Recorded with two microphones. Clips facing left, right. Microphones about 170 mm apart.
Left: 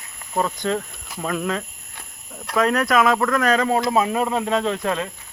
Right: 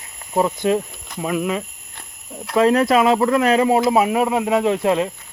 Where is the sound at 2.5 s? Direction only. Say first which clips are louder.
Right 4 dB; 30° right (ahead or behind).